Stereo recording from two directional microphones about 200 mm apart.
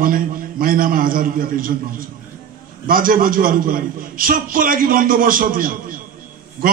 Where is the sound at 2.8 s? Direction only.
45° right (ahead or behind).